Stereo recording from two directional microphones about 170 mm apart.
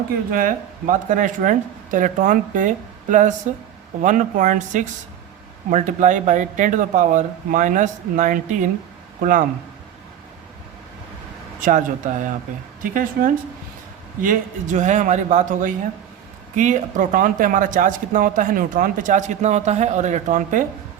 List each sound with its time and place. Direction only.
0.3 s speech: 55° right (ahead or behind)
11.6 s speech: 50° right (ahead or behind)